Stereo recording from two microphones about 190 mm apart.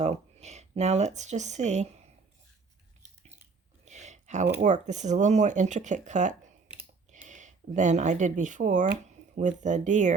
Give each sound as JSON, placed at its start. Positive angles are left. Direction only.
{"t": 0.0, "sound": "speech", "side_deg": -35}
{"t": 3.8, "sound": "a sound", "side_deg": -40}
{"t": 4.6, "sound": "speech", "side_deg": -40}